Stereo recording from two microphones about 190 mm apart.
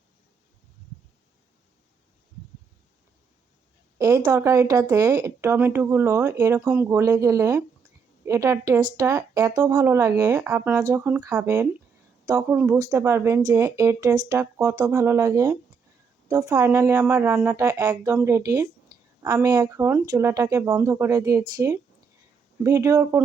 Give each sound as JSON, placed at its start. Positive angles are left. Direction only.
{"t": 3.9, "sound": "speech", "side_deg": -20}